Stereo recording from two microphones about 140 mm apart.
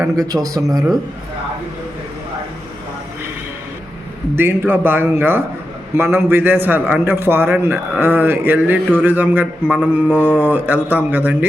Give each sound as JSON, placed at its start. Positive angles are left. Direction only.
{"t": 0.0, "sound": "speech", "side_deg": -25}
{"t": 4.4, "sound": "a man's voice", "side_deg": -15}